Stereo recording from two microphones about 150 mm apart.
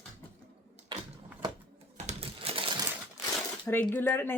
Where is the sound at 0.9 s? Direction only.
30° right (ahead or behind).